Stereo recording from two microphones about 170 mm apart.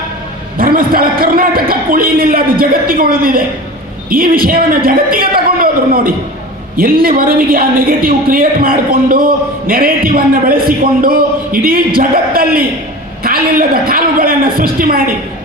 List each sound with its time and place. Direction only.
0.5 s a man's voice: 60° right (ahead or behind)